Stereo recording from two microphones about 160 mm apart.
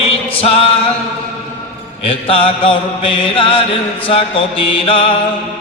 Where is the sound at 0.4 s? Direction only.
35° left (ahead or behind).